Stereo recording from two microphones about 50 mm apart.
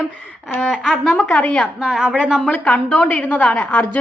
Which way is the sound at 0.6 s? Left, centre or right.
Centre.